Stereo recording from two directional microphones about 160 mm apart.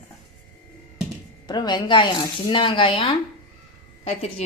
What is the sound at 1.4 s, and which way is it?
Speech, 25° left (ahead or behind).